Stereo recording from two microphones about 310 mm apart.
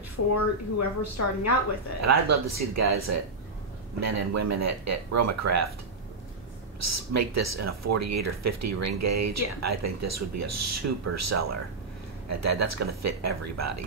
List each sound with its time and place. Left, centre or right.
0.1 s a woman's voice: left
2.0 s speech: right
6.8 s speech: right